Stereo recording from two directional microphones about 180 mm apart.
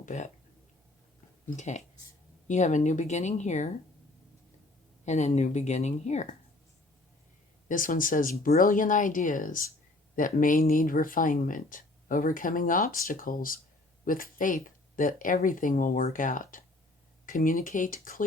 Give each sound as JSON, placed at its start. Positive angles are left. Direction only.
{"t": 0.0, "sound": "speech", "side_deg": 40}
{"t": 1.5, "sound": "speech", "side_deg": 40}
{"t": 5.0, "sound": "speech", "side_deg": 40}
{"t": 7.7, "sound": "speech", "side_deg": 50}